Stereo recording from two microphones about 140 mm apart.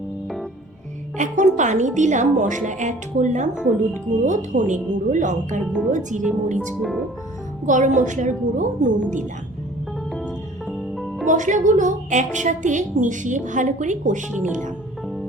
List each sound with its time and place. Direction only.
1.2 s a woman's voice: 60° right (ahead or behind)
3.5 s speech: 5° right (ahead or behind)
4.3 s a woman's voice: 60° right (ahead or behind)
7.6 s a woman's voice: 60° right (ahead or behind)
10.2 s music: centre (ahead or behind)
11.3 s a woman's voice: 60° right (ahead or behind)